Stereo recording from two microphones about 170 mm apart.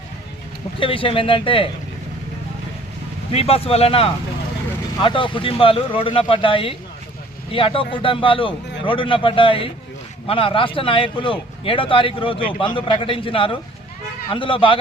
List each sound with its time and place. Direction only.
0.8 s speech: 30° left (ahead or behind)
3.3 s speech: 35° left (ahead or behind)